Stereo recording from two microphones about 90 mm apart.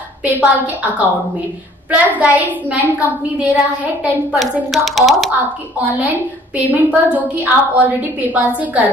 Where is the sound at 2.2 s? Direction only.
15° right (ahead or behind).